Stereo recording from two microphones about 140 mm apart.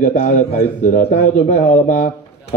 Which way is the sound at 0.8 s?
70° left (ahead or behind).